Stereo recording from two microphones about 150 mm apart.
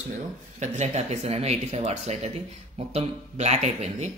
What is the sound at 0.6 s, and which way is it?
Speech, 50° right (ahead or behind).